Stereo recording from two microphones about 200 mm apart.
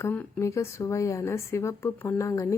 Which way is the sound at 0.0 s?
10° left (ahead or behind).